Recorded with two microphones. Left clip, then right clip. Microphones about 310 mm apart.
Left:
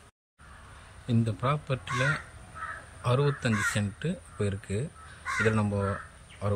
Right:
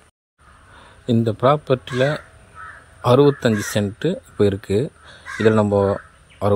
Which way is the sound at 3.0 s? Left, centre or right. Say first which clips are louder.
Right 14 dB; centre.